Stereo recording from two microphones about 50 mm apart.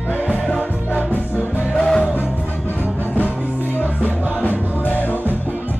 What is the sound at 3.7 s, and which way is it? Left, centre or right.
Music, left.